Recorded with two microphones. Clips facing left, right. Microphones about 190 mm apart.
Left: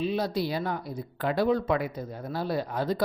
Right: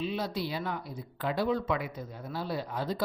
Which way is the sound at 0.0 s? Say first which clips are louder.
Left 5 dB; 40° left (ahead or behind).